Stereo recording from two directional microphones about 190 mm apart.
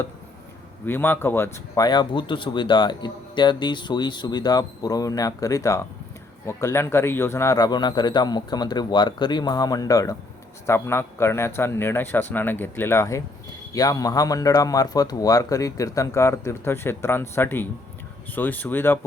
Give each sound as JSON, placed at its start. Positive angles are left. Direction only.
{"t": 0.9, "sound": "speech", "side_deg": 10}